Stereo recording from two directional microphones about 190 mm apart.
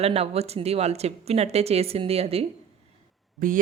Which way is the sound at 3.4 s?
45° right (ahead or behind).